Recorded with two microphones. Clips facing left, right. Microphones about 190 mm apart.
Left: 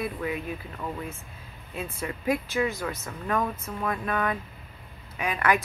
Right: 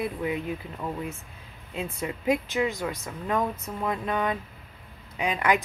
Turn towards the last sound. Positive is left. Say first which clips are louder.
# right 1 dB
turn(degrees=-15)  # may be behind; listen again after turning